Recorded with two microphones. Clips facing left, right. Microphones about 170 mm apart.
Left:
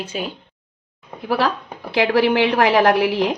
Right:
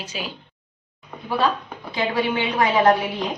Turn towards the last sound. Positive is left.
turn(degrees=80)